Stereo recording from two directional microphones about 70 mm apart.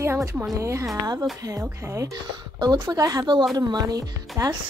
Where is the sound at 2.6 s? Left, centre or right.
Right.